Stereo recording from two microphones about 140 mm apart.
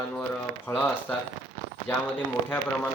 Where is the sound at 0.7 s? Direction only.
15° left (ahead or behind).